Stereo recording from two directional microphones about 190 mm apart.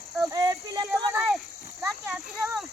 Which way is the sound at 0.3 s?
20° right (ahead or behind).